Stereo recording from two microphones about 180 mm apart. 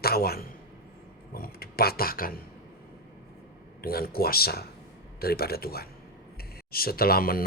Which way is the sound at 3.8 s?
55° left (ahead or behind).